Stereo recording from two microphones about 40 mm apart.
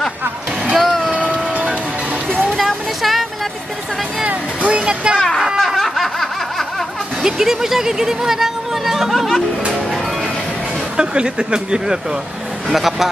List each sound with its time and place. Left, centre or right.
0.7 s vehicle: centre
1.1 s music: right
2.6 s music: centre
4.3 s music: right
5.7 s snicker: centre
7.2 s speech: centre
9.1 s speech: centre
11.0 s speech: right
12.7 s speech: centre